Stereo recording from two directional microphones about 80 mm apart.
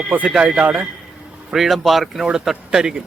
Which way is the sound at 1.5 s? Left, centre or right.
Centre.